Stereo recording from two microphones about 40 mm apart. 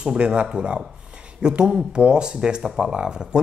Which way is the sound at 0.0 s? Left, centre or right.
Right.